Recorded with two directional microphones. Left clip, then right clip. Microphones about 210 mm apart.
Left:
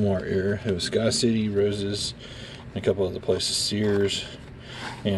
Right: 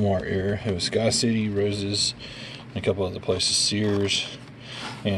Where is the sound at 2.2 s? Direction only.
15° left (ahead or behind).